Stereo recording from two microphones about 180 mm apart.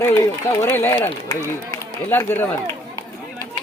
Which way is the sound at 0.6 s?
10° left (ahead or behind).